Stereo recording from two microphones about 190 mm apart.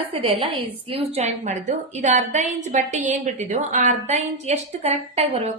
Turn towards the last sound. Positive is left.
turn(degrees=-35)  # may be behind; listen again after turning